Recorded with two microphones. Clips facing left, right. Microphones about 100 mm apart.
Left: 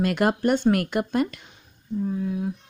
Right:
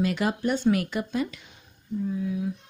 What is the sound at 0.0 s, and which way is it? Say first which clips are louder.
Speech: left 4 dB; 60° left (ahead or behind).